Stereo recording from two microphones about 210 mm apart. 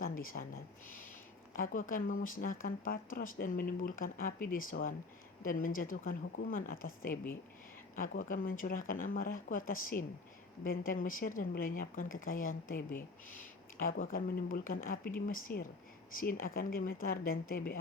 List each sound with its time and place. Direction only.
0.2 s speech: 40° left (ahead or behind)
1.5 s speech: 40° left (ahead or behind)